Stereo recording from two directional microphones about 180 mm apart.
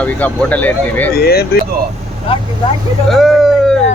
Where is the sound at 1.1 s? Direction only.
60° left (ahead or behind).